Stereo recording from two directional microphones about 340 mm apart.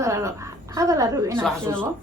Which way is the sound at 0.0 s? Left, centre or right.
Centre.